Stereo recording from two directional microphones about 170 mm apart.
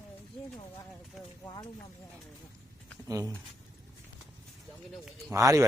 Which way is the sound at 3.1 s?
20° right (ahead or behind).